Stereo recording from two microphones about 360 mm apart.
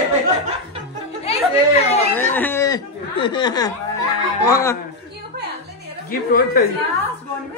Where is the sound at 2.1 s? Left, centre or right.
Centre.